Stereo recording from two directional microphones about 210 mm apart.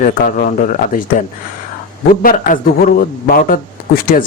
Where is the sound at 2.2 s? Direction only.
40° left (ahead or behind).